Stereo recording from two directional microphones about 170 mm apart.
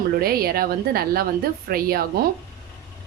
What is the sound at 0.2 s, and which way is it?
A woman's voice, 60° right (ahead or behind).